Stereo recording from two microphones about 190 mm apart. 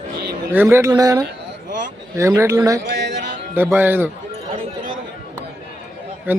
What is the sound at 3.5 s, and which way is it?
Speech, 10° right (ahead or behind).